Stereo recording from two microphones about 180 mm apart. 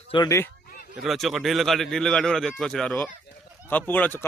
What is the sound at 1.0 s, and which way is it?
Speech, centre (ahead or behind).